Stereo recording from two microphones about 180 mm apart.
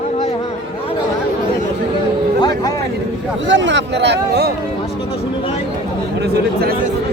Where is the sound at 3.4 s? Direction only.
90° right; by 4.5 s 65° right (ahead or behind).